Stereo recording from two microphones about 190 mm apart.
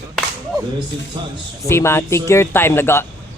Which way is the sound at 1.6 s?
15° left (ahead or behind).